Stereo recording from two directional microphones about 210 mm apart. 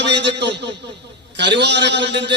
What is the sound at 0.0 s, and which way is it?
A man's voice, 55° right (ahead or behind).